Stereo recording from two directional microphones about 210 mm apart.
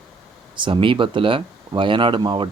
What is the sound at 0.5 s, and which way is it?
Speech, 25° right (ahead or behind).